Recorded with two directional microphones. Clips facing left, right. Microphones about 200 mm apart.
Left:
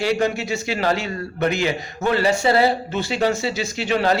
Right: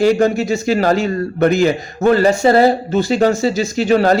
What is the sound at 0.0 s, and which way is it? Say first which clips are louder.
Speech: right 8 dB; 45° right (ahead or behind).